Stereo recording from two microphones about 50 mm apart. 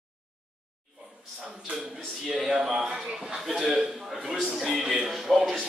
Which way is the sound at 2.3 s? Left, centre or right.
Centre.